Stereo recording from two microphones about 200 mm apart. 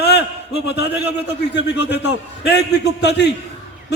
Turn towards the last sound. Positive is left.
turn(degrees=55)  # may be behind; listen again after turning